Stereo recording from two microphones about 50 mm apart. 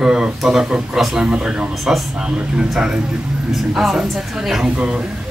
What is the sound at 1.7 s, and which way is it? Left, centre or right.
Speech, centre.